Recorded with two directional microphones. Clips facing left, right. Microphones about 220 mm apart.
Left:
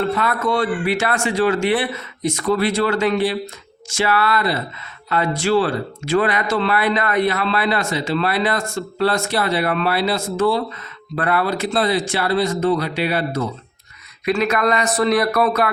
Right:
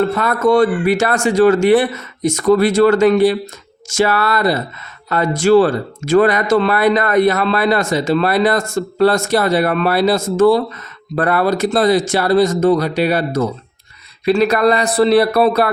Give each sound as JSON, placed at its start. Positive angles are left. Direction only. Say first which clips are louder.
{"t": 0.1, "sound": "speech", "louder": "right 6 dB", "side_deg": -45}